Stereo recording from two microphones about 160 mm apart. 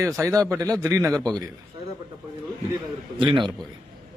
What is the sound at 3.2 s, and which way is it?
Speech, 30° right (ahead or behind).